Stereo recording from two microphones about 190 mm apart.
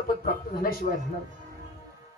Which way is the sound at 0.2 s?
50° left (ahead or behind).